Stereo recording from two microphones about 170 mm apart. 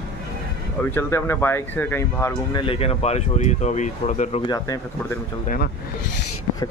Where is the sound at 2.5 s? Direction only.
35° left (ahead or behind).